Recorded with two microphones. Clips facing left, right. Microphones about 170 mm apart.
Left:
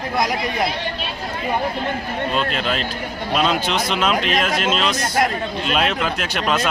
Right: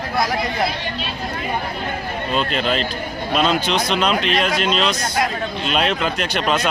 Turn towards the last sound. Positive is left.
turn(degrees=0)  # may be behind; listen again after turning